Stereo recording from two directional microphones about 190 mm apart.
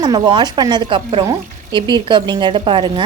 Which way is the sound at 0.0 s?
20° right (ahead or behind).